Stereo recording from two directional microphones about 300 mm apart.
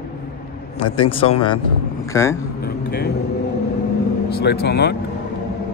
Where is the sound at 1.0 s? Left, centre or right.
Centre.